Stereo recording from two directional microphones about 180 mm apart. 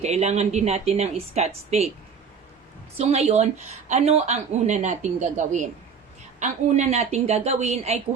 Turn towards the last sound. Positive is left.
turn(degrees=-35)  # may be behind; listen again after turning